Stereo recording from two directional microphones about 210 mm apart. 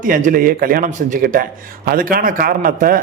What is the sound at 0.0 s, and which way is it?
A man's voice, 40° right (ahead or behind).